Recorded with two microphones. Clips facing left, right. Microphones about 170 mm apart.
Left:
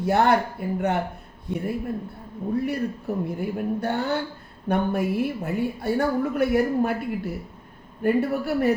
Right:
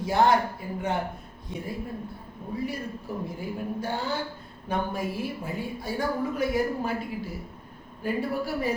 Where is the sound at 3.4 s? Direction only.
65° left (ahead or behind).